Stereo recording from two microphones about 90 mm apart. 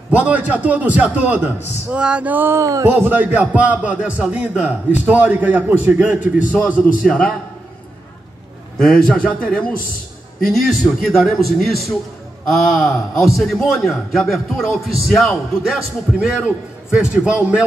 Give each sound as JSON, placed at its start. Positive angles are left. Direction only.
{"t": 0.1, "sound": "a man's voice", "side_deg": -20}
{"t": 2.6, "sound": "a man's voice", "side_deg": -35}
{"t": 7.1, "sound": "a man's voice", "side_deg": 5}
{"t": 8.7, "sound": "a man's voice", "side_deg": 10}
{"t": 11.1, "sound": "a man's voice", "side_deg": 0}